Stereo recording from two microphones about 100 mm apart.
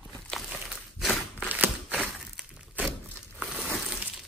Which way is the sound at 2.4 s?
5° right (ahead or behind).